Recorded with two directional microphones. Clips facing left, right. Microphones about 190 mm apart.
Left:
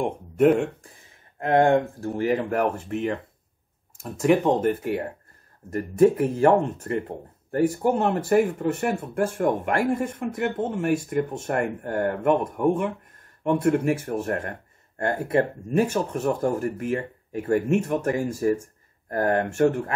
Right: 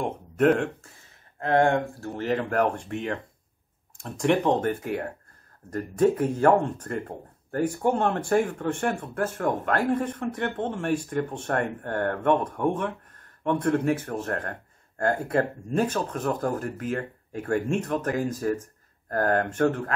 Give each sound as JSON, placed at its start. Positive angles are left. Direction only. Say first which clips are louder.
{"t": 0.0, "sound": "speech", "louder": "left 3 dB", "side_deg": 10}
{"t": 7.8, "sound": "speech", "louder": "left 2 dB", "side_deg": 5}
{"t": 15.7, "sound": "speech", "louder": "left 3 dB", "side_deg": 10}